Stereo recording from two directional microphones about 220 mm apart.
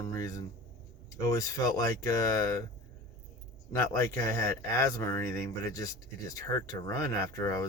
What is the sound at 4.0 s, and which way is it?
Speech, 10° left (ahead or behind).